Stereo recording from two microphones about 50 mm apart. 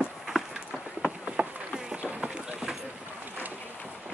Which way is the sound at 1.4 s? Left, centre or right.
Right.